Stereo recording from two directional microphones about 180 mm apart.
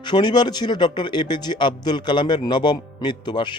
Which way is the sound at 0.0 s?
25° left (ahead or behind).